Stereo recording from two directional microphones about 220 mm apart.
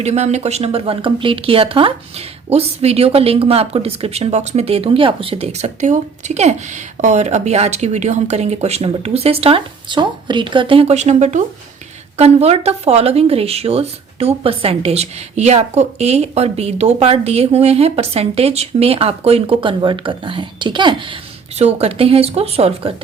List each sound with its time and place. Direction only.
0.0 s a woman's voice: 30° right (ahead or behind)